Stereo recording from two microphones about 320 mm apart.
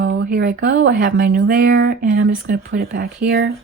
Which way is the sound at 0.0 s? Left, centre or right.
Right.